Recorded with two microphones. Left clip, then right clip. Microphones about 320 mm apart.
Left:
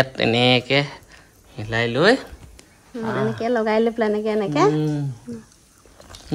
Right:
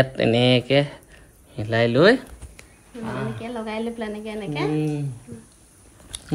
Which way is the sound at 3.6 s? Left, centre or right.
Left.